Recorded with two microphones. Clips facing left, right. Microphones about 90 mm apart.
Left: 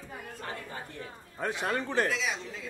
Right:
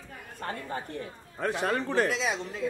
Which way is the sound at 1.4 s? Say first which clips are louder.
Right 3 dB; centre (ahead or behind).